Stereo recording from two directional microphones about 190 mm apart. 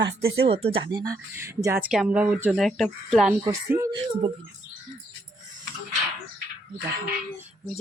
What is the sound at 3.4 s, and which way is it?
Speech, 15° right (ahead or behind).